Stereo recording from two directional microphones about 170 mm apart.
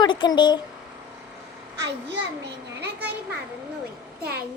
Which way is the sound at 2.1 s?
85° right.